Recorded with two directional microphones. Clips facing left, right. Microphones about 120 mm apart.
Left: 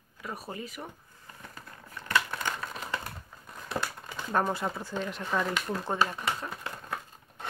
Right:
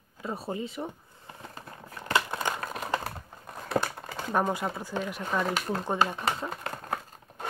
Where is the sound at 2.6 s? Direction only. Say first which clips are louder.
Right 5 dB; 40° right (ahead or behind).